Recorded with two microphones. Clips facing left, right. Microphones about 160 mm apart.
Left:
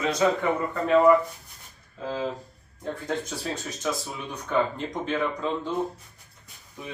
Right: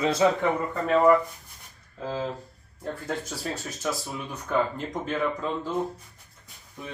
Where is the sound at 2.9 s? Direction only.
5° right (ahead or behind).